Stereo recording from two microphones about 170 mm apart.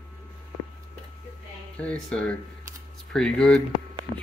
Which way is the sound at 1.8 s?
5° left (ahead or behind).